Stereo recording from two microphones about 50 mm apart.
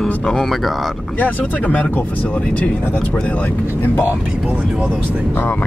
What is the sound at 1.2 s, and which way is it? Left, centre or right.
Speech, left.